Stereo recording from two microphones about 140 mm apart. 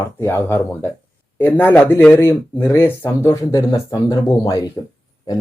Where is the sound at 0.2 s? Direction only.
15° left (ahead or behind).